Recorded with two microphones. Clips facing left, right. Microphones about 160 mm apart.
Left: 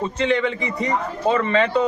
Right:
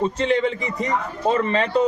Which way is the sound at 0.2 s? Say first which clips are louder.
Even; 40° right (ahead or behind).